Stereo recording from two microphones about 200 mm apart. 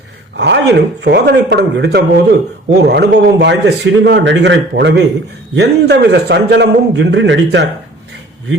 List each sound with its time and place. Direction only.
0.3 s a man's voice: 60° right (ahead or behind)